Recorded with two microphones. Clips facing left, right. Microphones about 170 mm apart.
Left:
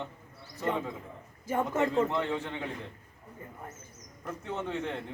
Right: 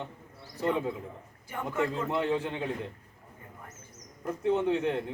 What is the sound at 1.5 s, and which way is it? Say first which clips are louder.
Speech: left 2 dB; 20° left (ahead or behind).